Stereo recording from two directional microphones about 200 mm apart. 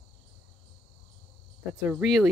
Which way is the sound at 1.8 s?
5° right (ahead or behind).